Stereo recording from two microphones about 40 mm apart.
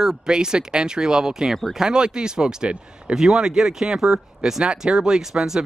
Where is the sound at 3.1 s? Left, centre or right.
Centre.